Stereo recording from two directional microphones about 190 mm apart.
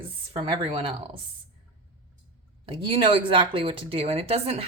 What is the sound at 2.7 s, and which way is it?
A woman's voice, 30° right (ahead or behind).